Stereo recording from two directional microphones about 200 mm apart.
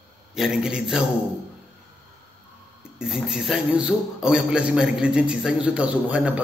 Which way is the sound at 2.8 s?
5° right (ahead or behind).